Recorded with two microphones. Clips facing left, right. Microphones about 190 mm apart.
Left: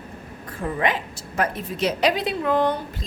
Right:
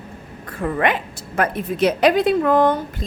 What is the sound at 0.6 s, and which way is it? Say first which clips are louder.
A woman's voice: right 4 dB; 65° right (ahead or behind).